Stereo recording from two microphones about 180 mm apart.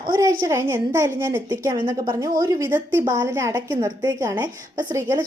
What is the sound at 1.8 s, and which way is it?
A woman's voice, 25° right (ahead or behind).